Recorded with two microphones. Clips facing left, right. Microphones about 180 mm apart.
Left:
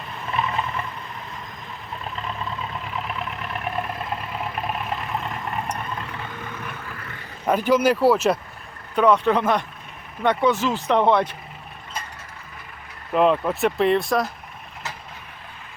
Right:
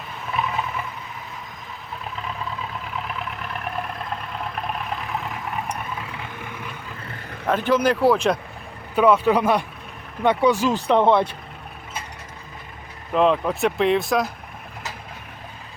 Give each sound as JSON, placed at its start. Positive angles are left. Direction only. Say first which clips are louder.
{"t": 0.3, "sound": "vehicle", "louder": "even", "side_deg": 0}
{"t": 1.9, "sound": "vehicle", "louder": "even", "side_deg": 0}
{"t": 7.4, "sound": "speech", "louder": "left 1 dB", "side_deg": 10}
{"t": 9.0, "sound": "speech", "louder": "right 1 dB", "side_deg": -5}
{"t": 13.1, "sound": "speech", "louder": "even", "side_deg": 0}